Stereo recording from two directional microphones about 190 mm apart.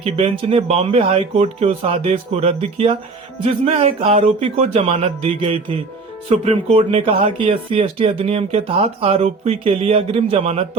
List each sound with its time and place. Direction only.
0.0 s speech: 30° right (ahead or behind)